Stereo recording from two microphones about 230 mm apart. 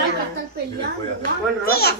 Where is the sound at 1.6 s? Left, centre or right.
Left.